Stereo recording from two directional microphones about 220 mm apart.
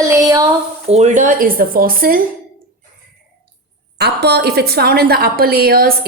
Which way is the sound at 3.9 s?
50° right (ahead or behind).